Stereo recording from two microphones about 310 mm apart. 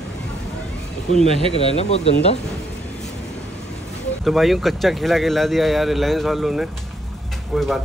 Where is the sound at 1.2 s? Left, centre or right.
Centre.